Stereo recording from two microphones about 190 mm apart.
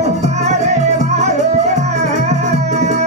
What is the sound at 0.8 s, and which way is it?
Music, 35° right (ahead or behind).